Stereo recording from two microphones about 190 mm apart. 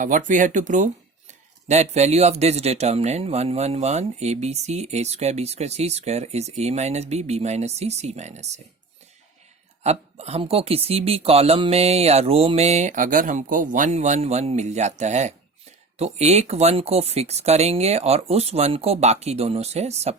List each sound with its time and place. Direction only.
0.0 s speech: 45° right (ahead or behind)
9.8 s speech: 35° right (ahead or behind)